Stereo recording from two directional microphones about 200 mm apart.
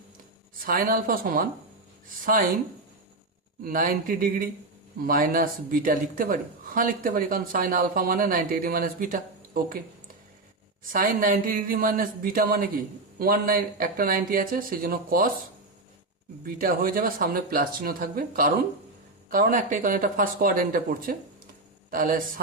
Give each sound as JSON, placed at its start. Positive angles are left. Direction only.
{"t": 0.6, "sound": "speech", "side_deg": -45}
{"t": 3.6, "sound": "speech", "side_deg": -45}
{"t": 10.8, "sound": "speech", "side_deg": -45}
{"t": 16.4, "sound": "speech", "side_deg": -45}